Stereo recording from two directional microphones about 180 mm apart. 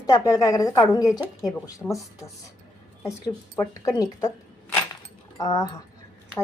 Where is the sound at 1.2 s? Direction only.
Centre (ahead or behind).